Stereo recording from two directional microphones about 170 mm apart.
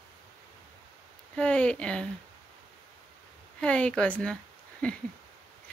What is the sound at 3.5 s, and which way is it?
Speech, 5° left (ahead or behind).